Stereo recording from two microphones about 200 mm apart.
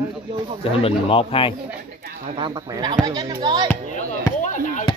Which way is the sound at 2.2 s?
25° right (ahead or behind).